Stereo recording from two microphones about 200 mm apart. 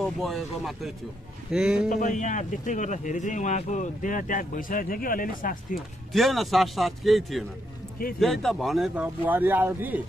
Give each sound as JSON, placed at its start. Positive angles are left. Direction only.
{"t": 0.0, "sound": "speech", "side_deg": 0}
{"t": 1.9, "sound": "speech", "side_deg": 40}
{"t": 6.1, "sound": "a man's voice", "side_deg": 0}